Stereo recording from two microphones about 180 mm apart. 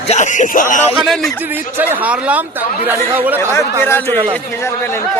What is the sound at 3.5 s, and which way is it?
Speech, 15° left (ahead or behind).